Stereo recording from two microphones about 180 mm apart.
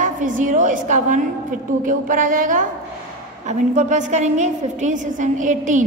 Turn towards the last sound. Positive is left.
turn(degrees=-45)  # may be behind; listen again after turning